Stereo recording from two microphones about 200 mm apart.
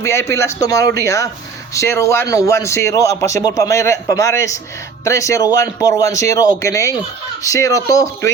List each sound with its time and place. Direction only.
0.0 s a man's voice: 15° left (ahead or behind)